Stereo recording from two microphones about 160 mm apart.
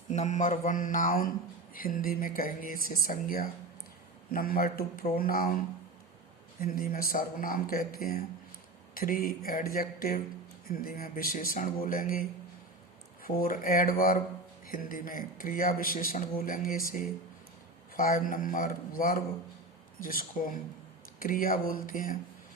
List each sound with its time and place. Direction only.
0.1 s mantra: 45° left (ahead or behind)
1.7 s speech: 60° left (ahead or behind)
6.6 s speech: 65° left (ahead or behind)
17.9 s speech: 60° left (ahead or behind)